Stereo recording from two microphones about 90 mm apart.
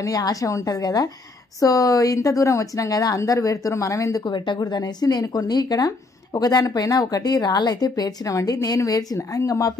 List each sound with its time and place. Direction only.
0.0 s speech: 40° left (ahead or behind)
4.2 s speech: 60° left (ahead or behind); by 9.8 s 40° left (ahead or behind)